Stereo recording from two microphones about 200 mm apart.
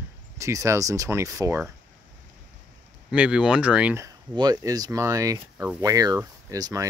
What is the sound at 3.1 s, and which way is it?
Speech, 5° right (ahead or behind).